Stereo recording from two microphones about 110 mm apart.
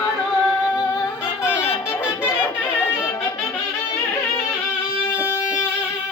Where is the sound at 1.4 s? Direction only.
20° left (ahead or behind).